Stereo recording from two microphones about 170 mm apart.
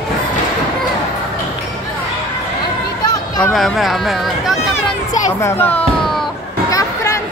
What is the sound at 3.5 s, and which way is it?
Speech, centre (ahead or behind).